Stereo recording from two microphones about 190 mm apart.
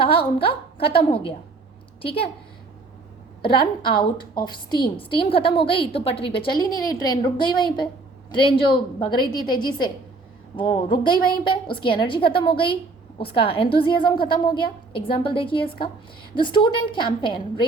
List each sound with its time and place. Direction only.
0.2 s a woman's voice: 30° left (ahead or behind)
3.4 s a woman's voice: 25° left (ahead or behind)